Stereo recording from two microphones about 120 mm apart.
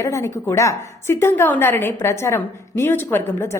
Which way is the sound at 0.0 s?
25° left (ahead or behind).